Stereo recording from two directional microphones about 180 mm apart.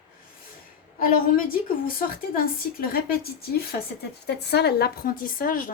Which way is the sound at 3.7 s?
65° left (ahead or behind).